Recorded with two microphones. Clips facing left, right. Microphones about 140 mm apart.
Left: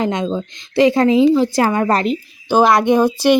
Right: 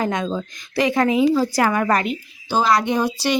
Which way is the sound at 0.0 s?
25° left (ahead or behind).